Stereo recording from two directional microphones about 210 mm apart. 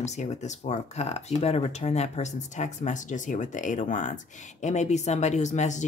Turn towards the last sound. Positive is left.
turn(degrees=35)  # may be behind; listen again after turning